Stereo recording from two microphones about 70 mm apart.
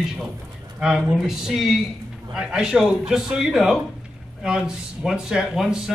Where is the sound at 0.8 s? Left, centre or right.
Centre.